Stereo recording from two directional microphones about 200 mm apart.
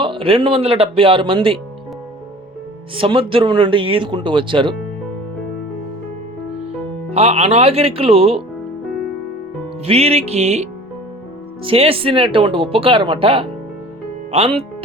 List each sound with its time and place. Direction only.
0.0 s speech: 25° right (ahead or behind)
2.9 s speech: 25° right (ahead or behind)
7.1 s speech: 30° right (ahead or behind)
9.8 s speech: 30° right (ahead or behind)